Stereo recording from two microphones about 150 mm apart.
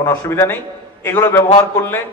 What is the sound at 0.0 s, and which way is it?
A man's voice, 15° left (ahead or behind).